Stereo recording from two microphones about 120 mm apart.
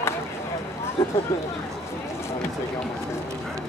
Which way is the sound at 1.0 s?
20° left (ahead or behind).